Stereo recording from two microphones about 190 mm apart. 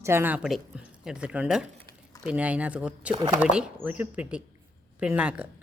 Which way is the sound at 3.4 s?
5° right (ahead or behind).